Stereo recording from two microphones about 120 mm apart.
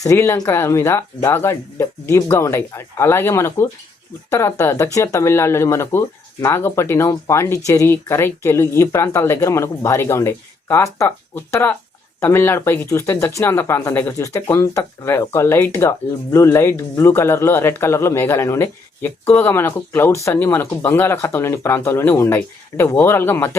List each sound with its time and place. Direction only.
0.0 s speech: 25° left (ahead or behind)